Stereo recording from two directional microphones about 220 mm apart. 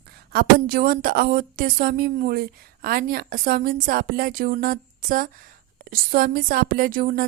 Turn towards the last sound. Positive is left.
turn(degrees=-40)  # may be behind; listen again after turning